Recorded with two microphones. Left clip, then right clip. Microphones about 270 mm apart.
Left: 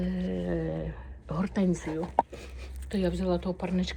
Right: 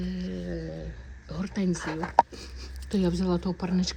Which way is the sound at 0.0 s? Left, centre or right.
Centre.